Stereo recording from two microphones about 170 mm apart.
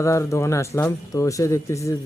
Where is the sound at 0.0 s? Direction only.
15° left (ahead or behind).